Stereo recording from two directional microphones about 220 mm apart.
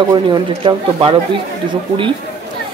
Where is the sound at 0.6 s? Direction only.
25° right (ahead or behind).